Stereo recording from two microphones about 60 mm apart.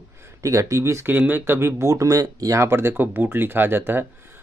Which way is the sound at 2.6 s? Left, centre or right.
Right.